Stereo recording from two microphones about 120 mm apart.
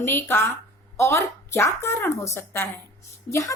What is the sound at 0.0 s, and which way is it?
A woman's voice, 20° left (ahead or behind).